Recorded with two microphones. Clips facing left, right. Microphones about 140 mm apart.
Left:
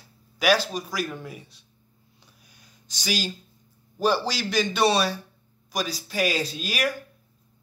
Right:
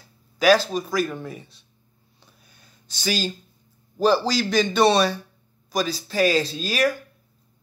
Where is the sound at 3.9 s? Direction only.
10° left (ahead or behind).